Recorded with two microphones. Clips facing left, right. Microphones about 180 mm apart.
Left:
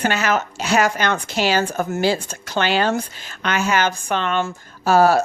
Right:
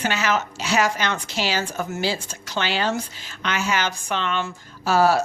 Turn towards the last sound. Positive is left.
turn(degrees=50)  # may be behind; listen again after turning